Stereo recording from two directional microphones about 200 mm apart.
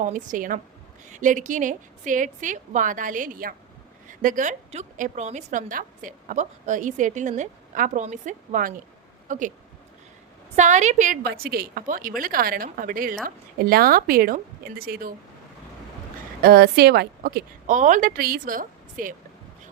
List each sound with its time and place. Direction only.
0.0 s a woman's voice: 40° right (ahead or behind)
10.5 s a woman's voice: 35° right (ahead or behind)
16.4 s a woman's voice: 50° right (ahead or behind)